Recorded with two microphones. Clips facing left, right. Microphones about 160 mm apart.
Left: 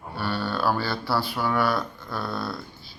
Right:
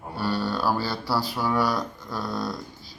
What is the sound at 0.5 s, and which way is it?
Speech, 10° right (ahead or behind).